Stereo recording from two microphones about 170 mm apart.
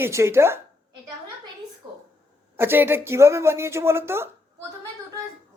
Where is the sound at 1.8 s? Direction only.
25° right (ahead or behind).